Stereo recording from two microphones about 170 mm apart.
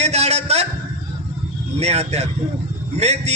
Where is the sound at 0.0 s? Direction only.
40° right (ahead or behind).